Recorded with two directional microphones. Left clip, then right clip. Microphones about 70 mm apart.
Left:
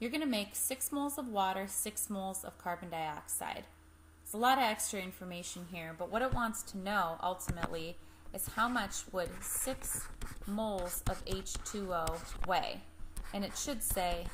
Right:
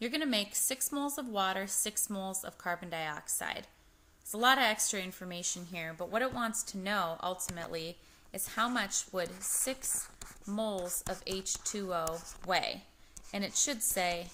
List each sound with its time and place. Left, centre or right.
0.0 s a woman's voice: right